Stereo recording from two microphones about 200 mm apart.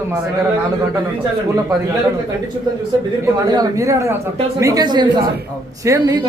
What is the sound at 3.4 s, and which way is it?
A man's voice, 20° right (ahead or behind).